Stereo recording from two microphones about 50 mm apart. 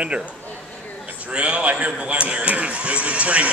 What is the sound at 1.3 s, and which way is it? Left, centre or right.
Speech, right.